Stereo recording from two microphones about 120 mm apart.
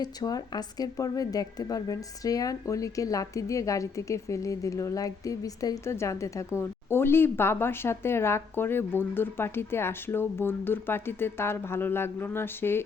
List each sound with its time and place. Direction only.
0.0 s a woman's voice: 30° left (ahead or behind)